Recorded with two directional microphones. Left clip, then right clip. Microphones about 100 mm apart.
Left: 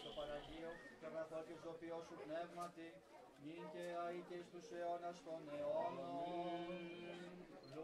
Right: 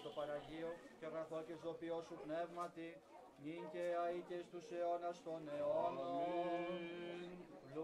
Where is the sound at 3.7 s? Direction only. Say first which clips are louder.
Right 6 dB; 15° right (ahead or behind).